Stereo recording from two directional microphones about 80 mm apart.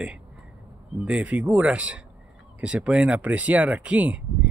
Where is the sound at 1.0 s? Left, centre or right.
Centre.